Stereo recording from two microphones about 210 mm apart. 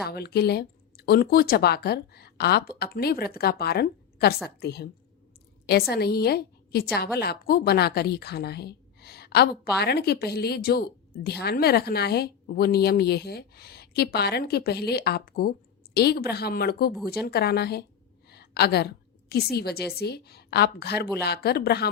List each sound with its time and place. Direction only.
0.0 s a woman's voice: 50° left (ahead or behind)
5.9 s a woman's voice: 50° left (ahead or behind)